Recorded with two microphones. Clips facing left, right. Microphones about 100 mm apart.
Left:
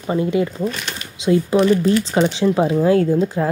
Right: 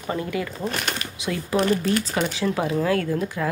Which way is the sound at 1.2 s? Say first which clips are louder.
Left 9 dB; 25° left (ahead or behind).